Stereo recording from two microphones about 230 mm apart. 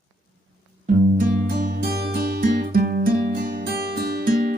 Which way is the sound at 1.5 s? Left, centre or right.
Right.